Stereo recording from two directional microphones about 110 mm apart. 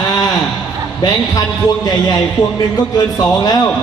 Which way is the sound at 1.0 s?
35° left (ahead or behind).